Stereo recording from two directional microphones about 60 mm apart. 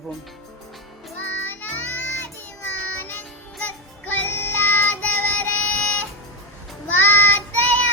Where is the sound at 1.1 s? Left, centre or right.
Left.